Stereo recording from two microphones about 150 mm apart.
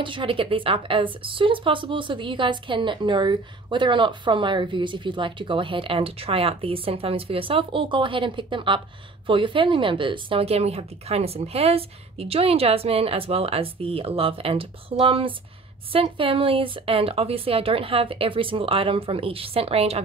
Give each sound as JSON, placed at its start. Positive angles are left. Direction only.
{"t": 0.0, "sound": "a woman's voice", "side_deg": -35}